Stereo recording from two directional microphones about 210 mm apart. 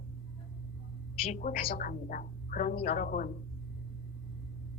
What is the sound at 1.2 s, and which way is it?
A woman's voice, 30° left (ahead or behind).